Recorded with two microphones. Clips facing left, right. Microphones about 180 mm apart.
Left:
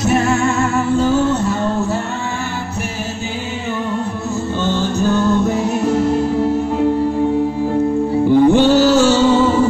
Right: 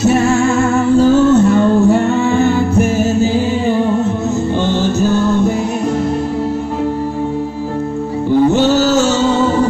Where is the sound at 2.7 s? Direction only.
50° right (ahead or behind); by 4.1 s 30° right (ahead or behind).